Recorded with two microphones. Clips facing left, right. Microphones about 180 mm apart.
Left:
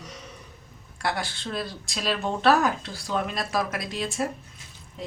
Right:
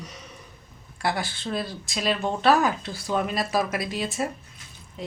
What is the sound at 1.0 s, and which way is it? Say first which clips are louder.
Speech: right 2 dB; centre (ahead or behind).